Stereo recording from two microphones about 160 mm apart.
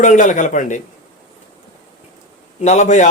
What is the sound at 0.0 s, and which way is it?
Speech, 50° left (ahead or behind).